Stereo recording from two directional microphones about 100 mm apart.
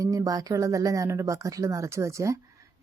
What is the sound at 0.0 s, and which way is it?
Speech, 35° right (ahead or behind).